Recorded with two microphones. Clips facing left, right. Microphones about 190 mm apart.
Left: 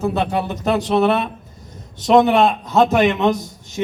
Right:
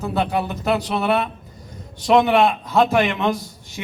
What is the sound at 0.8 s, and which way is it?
Speech, 20° left (ahead or behind).